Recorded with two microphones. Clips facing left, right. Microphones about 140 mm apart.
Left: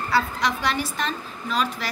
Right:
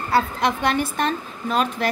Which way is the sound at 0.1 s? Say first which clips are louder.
Right 4 dB; 55° right (ahead or behind).